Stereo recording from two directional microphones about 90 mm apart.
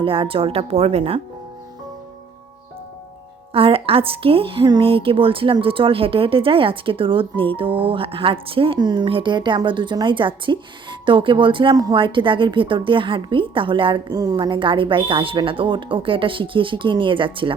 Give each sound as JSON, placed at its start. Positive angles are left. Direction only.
{"t": 0.0, "sound": "speech", "side_deg": -80}
{"t": 3.5, "sound": "a woman's voice", "side_deg": -90}
{"t": 8.8, "sound": "speech", "side_deg": -55}
{"t": 9.0, "sound": "speech", "side_deg": -75}
{"t": 11.7, "sound": "a woman's voice", "side_deg": -45}
{"t": 11.9, "sound": "speech", "side_deg": -65}
{"t": 14.1, "sound": "a woman's voice", "side_deg": -45}
{"t": 14.3, "sound": "speech", "side_deg": -65}